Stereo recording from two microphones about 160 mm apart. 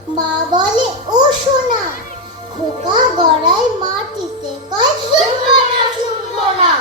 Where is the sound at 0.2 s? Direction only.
25° right (ahead or behind).